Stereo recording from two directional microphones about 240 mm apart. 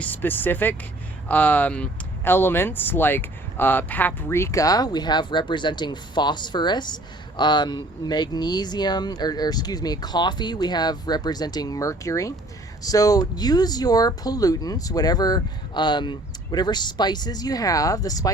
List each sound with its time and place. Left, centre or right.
0.0 s speech: centre